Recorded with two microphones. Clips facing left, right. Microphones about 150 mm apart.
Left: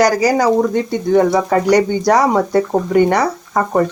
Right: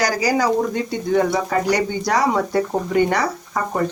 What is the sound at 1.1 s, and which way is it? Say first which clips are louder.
Speech: left 6 dB; 35° left (ahead or behind).